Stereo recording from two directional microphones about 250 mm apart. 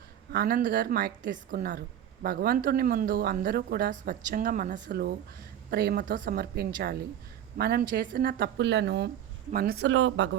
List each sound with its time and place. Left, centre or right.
0.3 s speech: right